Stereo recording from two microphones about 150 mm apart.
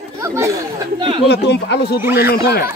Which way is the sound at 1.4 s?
90° left.